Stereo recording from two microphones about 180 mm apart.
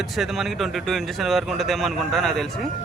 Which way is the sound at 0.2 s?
Centre (ahead or behind).